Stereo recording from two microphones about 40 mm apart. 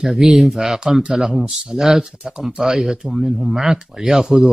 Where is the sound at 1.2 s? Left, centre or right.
Centre.